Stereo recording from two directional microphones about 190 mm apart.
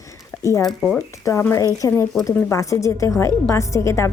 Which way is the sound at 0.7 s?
Centre (ahead or behind).